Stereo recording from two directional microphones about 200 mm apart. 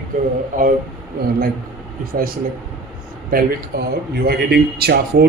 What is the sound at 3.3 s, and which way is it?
A man's voice, 50° right (ahead or behind).